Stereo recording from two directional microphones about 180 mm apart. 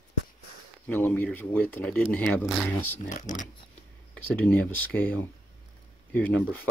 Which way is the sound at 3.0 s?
45° left (ahead or behind).